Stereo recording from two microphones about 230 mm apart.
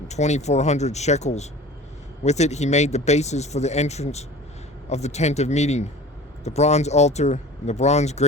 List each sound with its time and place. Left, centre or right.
0.1 s speech: left